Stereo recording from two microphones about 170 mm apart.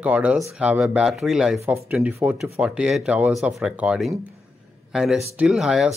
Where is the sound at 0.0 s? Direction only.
10° right (ahead or behind).